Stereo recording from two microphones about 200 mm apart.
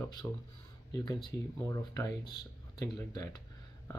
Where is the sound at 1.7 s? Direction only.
15° left (ahead or behind).